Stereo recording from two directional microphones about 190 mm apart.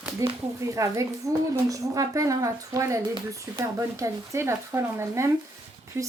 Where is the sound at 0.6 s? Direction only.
15° right (ahead or behind).